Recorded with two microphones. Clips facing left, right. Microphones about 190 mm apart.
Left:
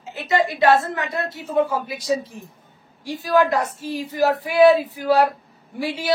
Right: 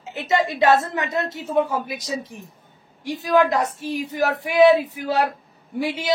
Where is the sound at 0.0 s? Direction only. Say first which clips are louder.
Even; 20° right (ahead or behind).